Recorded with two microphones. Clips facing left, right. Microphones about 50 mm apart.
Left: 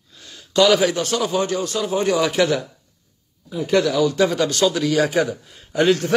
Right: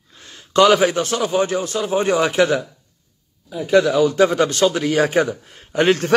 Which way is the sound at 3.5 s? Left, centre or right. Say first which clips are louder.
Right 3 dB; centre.